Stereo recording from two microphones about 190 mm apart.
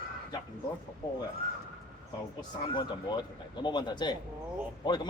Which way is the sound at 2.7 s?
25° left (ahead or behind).